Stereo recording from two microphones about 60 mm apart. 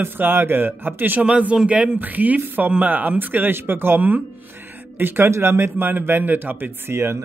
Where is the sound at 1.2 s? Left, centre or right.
Right.